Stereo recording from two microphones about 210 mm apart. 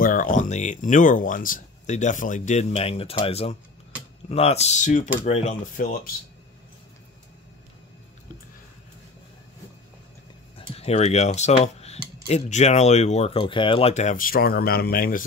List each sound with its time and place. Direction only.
0.0 s speech: 40° left (ahead or behind)
10.8 s speech: 30° left (ahead or behind)